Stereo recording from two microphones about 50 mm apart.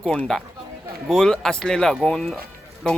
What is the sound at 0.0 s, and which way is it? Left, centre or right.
Speech, left.